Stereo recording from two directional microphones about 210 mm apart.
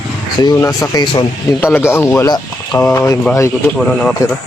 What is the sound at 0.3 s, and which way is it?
Speech, 15° left (ahead or behind).